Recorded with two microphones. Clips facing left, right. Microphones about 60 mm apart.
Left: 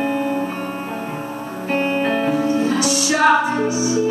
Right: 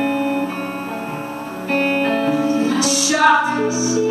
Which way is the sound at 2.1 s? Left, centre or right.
Left.